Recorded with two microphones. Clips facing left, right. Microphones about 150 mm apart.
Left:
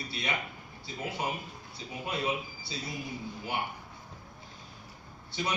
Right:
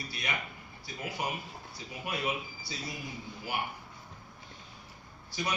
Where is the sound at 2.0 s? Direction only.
25° left (ahead or behind).